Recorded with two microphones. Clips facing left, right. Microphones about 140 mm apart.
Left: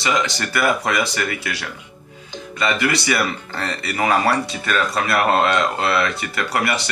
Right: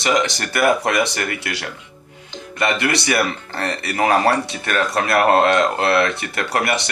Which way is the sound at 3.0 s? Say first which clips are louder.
Right 1 dB; 55° right (ahead or behind).